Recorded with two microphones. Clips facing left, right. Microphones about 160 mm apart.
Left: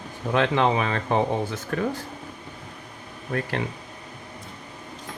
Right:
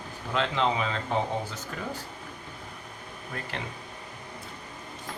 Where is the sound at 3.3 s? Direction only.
55° left (ahead or behind).